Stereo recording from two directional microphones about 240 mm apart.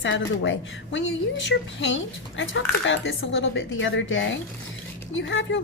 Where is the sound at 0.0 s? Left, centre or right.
Left.